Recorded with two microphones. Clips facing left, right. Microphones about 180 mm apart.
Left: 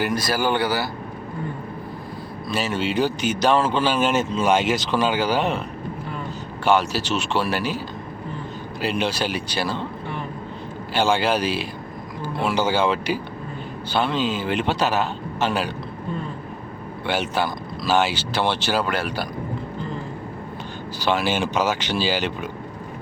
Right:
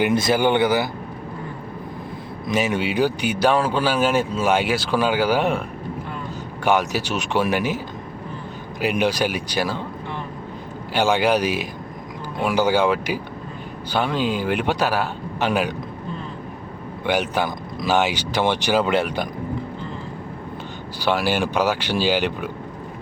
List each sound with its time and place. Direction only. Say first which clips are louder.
0.0 s speech: right 4 dB; 25° right (ahead or behind)
2.5 s a man's voice: right 3 dB; 15° right (ahead or behind)
6.7 s a man's voice: even; 15° right (ahead or behind)
8.8 s a man's voice: right 3 dB; 15° right (ahead or behind)
10.9 s a man's voice: right 2 dB; 15° right (ahead or behind)
17.1 s a man's voice: right 2 dB; 15° right (ahead or behind)
21.0 s a man's voice: right 1 dB; 15° right (ahead or behind)